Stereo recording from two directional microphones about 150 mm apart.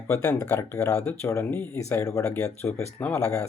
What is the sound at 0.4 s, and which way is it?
Speech, 10° left (ahead or behind).